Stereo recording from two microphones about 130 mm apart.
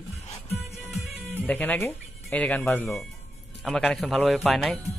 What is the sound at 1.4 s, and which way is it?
Speech, 15° left (ahead or behind).